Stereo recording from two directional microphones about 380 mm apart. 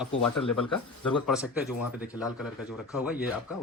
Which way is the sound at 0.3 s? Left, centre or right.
Left.